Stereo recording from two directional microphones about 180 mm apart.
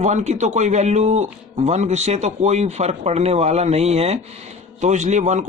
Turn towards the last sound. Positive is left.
turn(degrees=-40)  # may be behind; listen again after turning